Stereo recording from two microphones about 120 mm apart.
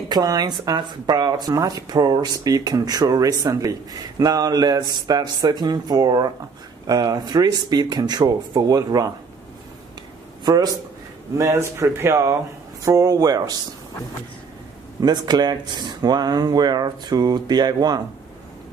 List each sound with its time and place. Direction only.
0.1 s speech: 30° right (ahead or behind)
10.4 s a man's voice: 35° right (ahead or behind)
15.0 s speech: 35° right (ahead or behind)